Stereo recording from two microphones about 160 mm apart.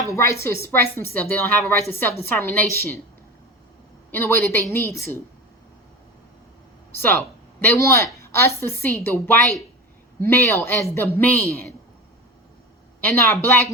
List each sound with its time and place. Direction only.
0.0 s a woman's voice: 20° left (ahead or behind)
4.1 s a woman's voice: 15° left (ahead or behind)
7.0 s a woman's voice: 15° left (ahead or behind)
13.1 s a woman's voice: 15° left (ahead or behind)